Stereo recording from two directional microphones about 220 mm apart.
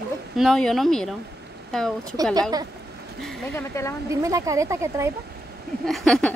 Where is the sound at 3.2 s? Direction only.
10° left (ahead or behind).